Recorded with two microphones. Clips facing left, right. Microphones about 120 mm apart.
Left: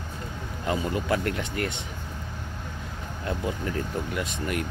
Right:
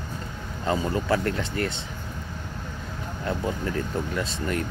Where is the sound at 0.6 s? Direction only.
30° right (ahead or behind).